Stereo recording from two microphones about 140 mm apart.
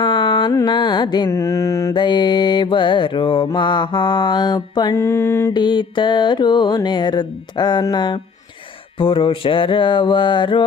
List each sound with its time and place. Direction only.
0.0 s carnatic music: 35° left (ahead or behind)
0.5 s mantra: 30° left (ahead or behind)
1.3 s mantra: 20° left (ahead or behind)
5.5 s mantra: 35° left (ahead or behind)